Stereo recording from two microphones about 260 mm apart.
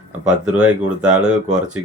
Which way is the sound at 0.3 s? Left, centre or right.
Centre.